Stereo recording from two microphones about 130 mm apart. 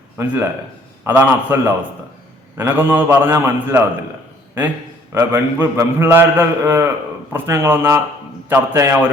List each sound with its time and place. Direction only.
0.2 s a man's voice: 20° right (ahead or behind)
5.1 s a man's voice: 15° right (ahead or behind)